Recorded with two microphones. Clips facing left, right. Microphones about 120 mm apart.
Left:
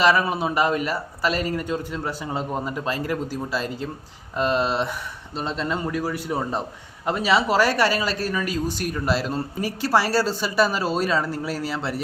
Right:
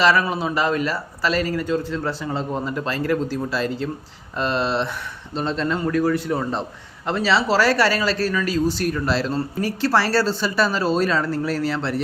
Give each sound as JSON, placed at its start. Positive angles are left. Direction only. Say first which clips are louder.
{"t": 0.0, "sound": "a man's voice", "louder": "right 1 dB", "side_deg": 20}